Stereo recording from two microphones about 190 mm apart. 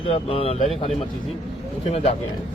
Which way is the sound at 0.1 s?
30° left (ahead or behind).